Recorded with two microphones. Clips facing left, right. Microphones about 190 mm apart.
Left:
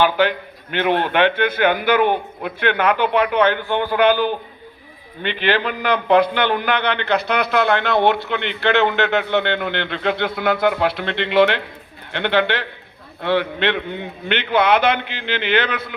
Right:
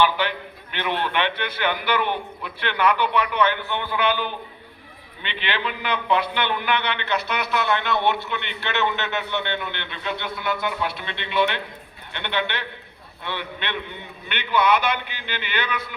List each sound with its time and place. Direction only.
0.0 s a man's voice: 50° left (ahead or behind)